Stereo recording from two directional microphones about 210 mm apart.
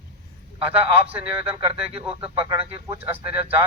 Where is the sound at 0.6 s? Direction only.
25° right (ahead or behind).